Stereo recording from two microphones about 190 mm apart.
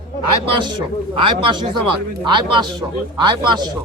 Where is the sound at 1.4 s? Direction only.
25° right (ahead or behind).